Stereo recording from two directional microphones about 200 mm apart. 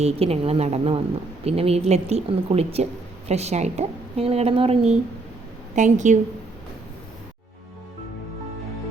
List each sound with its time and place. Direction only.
0.0 s a woman's voice: 30° right (ahead or behind)